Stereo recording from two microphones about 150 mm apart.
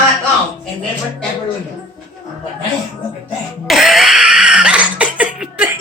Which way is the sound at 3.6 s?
Centre (ahead or behind).